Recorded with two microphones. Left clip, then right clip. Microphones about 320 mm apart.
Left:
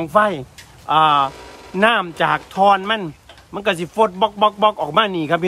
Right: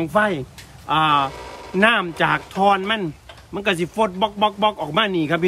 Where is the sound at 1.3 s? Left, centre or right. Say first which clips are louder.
Right 2 dB; centre.